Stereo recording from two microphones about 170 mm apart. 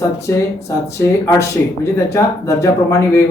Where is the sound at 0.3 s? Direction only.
15° left (ahead or behind).